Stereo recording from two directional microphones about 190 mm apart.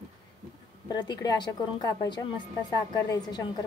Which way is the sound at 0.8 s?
20° left (ahead or behind).